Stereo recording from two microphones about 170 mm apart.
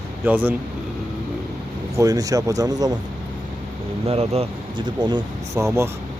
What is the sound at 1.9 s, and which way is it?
Speech, 20° right (ahead or behind).